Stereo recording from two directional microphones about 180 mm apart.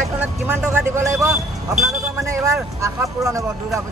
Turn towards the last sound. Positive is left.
turn(degrees=-15)  # may be behind; listen again after turning